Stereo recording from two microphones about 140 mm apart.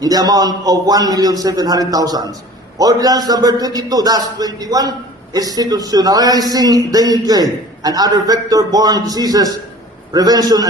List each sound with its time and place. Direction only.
0.0 s a man's voice: 25° right (ahead or behind)